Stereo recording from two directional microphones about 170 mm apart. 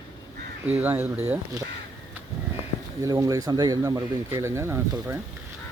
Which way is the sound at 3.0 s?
20° right (ahead or behind).